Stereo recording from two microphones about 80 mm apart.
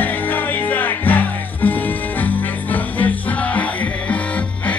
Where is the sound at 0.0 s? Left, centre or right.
Left.